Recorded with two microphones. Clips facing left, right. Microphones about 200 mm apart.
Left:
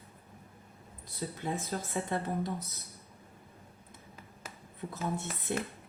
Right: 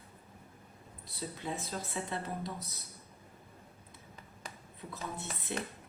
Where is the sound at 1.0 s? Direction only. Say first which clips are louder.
Left 3 dB; 50° left (ahead or behind).